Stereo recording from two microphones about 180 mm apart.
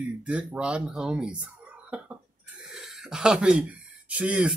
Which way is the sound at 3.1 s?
5° right (ahead or behind).